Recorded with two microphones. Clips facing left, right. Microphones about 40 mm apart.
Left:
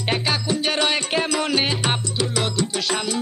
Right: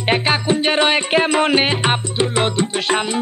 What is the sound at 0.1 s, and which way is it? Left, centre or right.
Music, right.